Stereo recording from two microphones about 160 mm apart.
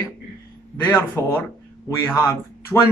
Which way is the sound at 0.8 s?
10° left (ahead or behind).